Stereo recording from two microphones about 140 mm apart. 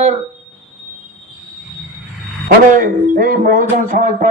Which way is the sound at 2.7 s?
80° right.